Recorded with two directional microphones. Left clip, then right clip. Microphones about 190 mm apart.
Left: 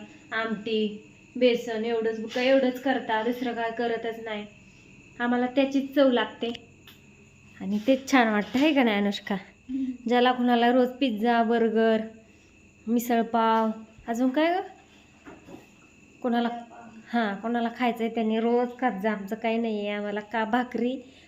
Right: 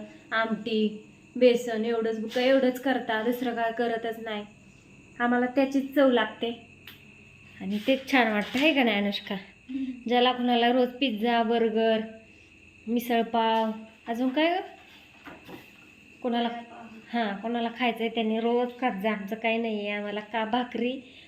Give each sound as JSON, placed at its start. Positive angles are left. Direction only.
{"t": 0.3, "sound": "a woman's voice", "side_deg": -5}
{"t": 7.6, "sound": "a woman's voice", "side_deg": 15}
{"t": 16.2, "sound": "a woman's voice", "side_deg": 15}